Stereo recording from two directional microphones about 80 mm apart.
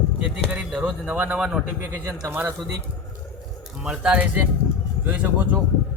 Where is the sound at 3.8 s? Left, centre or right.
Centre.